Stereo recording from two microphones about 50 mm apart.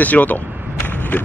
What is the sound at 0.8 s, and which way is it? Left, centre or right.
Vehicle, left.